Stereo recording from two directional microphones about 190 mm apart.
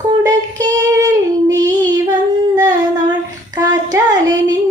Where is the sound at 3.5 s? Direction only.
20° right (ahead or behind).